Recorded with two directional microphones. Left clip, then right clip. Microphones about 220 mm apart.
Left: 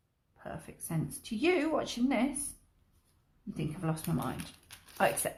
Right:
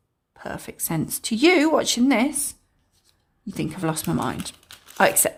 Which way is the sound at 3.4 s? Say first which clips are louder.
Right 11 dB; 50° right (ahead or behind).